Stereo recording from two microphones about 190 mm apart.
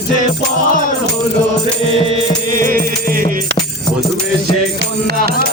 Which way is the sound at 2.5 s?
50° right (ahead or behind).